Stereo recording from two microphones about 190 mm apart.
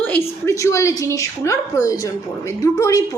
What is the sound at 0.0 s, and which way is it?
A woman's voice, 10° left (ahead or behind).